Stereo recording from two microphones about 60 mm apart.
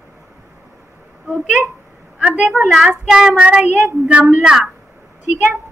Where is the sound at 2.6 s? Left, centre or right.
Centre.